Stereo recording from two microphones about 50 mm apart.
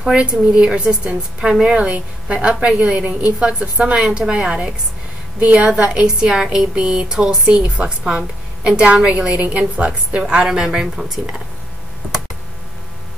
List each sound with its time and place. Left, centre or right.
0.0 s a woman's voice: centre